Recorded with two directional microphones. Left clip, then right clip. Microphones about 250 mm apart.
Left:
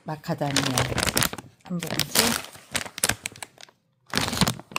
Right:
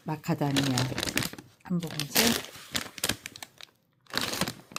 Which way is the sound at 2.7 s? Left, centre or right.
Left.